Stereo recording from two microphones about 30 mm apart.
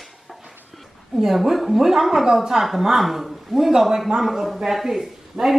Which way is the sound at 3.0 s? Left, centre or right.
Centre.